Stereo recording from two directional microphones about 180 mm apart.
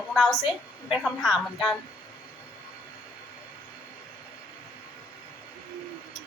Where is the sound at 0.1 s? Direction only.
5° left (ahead or behind).